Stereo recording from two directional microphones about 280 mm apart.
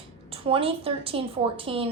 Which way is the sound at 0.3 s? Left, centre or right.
Centre.